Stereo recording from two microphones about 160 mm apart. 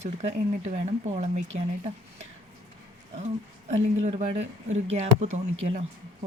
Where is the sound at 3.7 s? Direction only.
45° right (ahead or behind).